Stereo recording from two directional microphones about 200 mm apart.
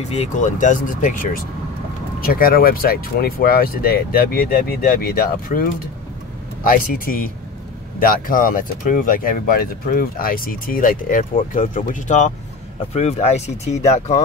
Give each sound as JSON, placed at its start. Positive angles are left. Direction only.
{"t": 0.1, "sound": "speech", "side_deg": 35}